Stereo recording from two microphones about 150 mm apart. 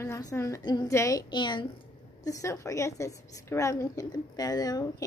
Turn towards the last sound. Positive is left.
turn(degrees=25)  # may be behind; listen again after turning